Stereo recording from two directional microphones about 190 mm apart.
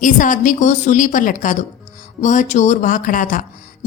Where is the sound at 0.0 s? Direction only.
45° left (ahead or behind).